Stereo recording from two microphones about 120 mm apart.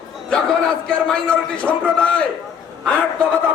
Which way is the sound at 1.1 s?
10° left (ahead or behind).